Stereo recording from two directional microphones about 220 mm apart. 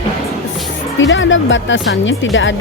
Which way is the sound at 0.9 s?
60° left (ahead or behind).